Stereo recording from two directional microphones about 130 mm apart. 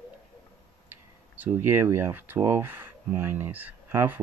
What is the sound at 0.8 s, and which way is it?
Speech, 15° right (ahead or behind).